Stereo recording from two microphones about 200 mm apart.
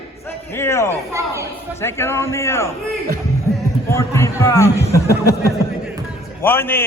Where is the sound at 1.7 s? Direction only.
15° left (ahead or behind).